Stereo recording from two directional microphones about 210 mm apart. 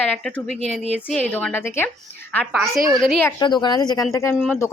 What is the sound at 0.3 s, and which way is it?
Speech, 5° left (ahead or behind).